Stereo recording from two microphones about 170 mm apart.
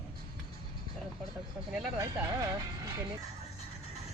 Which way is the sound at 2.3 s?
25° right (ahead or behind).